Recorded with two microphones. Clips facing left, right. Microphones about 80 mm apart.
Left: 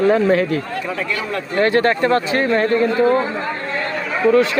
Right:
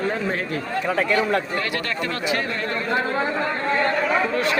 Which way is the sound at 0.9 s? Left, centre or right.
Right.